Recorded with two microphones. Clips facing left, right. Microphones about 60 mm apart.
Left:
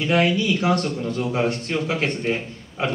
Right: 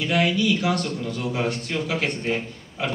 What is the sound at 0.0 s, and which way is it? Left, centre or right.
A man's voice, left.